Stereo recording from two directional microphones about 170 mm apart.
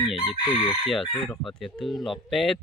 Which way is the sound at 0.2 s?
30° left (ahead or behind).